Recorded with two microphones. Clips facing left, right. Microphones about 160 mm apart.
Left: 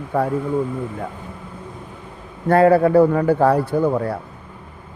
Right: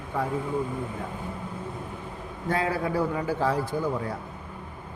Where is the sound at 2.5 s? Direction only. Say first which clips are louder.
Left 14 dB; 60° left (ahead or behind).